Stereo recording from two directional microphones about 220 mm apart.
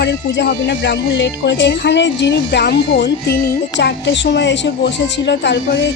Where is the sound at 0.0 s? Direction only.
50° left (ahead or behind).